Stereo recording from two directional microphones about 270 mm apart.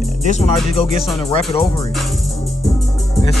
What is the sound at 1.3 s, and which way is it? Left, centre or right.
Music, left.